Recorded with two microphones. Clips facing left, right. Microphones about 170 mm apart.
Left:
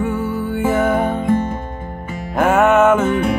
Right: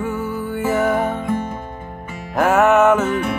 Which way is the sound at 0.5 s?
Centre (ahead or behind).